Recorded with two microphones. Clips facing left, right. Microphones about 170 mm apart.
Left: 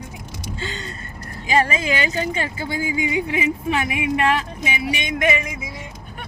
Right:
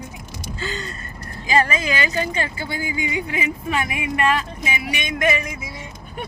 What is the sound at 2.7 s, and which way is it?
Speech, 10° left (ahead or behind).